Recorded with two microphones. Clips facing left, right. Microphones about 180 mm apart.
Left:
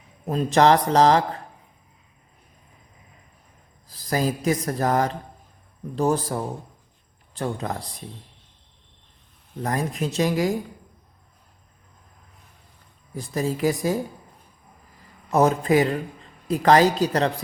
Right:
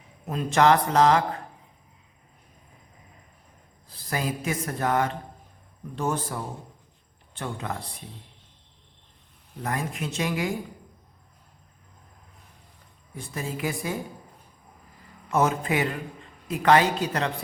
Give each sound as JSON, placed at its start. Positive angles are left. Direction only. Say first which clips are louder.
{"t": 0.3, "sound": "speech", "louder": "left 3 dB", "side_deg": 35}
{"t": 3.9, "sound": "speech", "louder": "left 5 dB", "side_deg": 35}
{"t": 9.6, "sound": "speech", "louder": "left 4 dB", "side_deg": 35}
{"t": 13.1, "sound": "speech", "louder": "left 7 dB", "side_deg": 35}
{"t": 15.3, "sound": "speech", "louder": "left 5 dB", "side_deg": 35}